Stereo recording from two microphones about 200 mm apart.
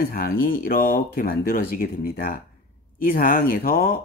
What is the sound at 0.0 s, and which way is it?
Speech, 50° left (ahead or behind).